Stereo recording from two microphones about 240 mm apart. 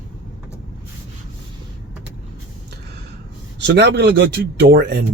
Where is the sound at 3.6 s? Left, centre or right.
Right.